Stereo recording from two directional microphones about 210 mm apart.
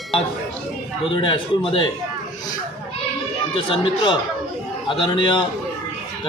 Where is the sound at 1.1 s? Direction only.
25° left (ahead or behind).